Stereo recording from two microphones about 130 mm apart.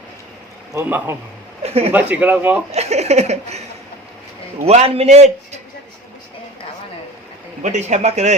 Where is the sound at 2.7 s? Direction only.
55° right (ahead or behind).